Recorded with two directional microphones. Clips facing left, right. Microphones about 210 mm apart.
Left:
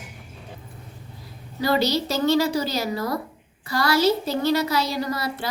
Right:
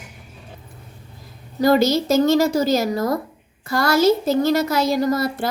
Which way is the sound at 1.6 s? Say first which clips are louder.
Right 6 dB; 45° right (ahead or behind).